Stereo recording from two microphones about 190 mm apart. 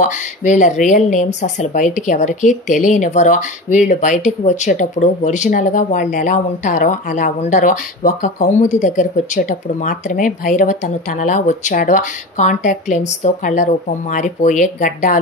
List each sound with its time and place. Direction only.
0.0 s speech: 40° left (ahead or behind)